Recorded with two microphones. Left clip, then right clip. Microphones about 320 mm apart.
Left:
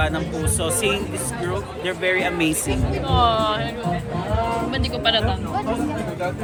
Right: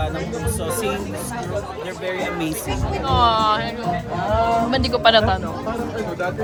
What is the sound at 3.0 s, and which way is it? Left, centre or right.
Speech, centre.